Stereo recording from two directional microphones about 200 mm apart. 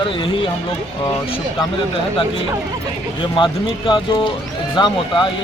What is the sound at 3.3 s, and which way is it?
Speech, 25° left (ahead or behind).